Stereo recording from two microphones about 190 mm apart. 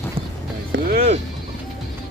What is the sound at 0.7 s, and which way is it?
Speech, 50° right (ahead or behind).